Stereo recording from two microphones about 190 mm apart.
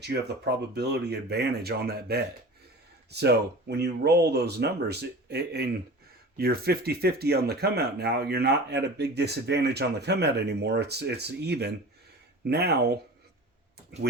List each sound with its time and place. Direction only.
0.0 s speech: 60° right (ahead or behind)